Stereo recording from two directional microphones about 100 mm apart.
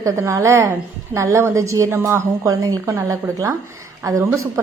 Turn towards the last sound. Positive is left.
turn(degrees=-30)  # may be behind; listen again after turning